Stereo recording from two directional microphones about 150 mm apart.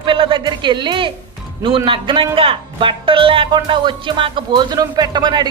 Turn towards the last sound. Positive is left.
turn(degrees=-30)  # may be behind; listen again after turning